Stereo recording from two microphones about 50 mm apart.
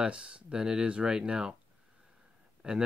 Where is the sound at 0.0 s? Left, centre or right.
Right.